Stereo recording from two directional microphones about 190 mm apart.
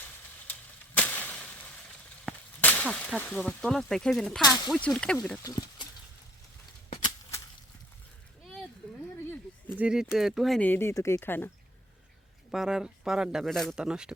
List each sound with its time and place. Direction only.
0.9 s a sound: 10° left (ahead or behind)
2.6 s speech: 10° left (ahead or behind)
5.4 s speech: 20° left (ahead or behind)
9.7 s speech: 5° right (ahead or behind)
12.5 s speech: 5° right (ahead or behind)